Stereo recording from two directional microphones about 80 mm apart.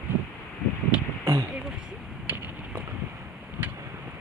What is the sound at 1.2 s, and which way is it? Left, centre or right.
Speech, right.